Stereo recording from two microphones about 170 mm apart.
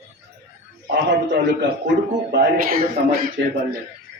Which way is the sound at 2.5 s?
55° right (ahead or behind).